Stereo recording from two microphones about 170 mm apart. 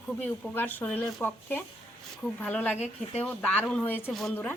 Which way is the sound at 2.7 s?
40° left (ahead or behind).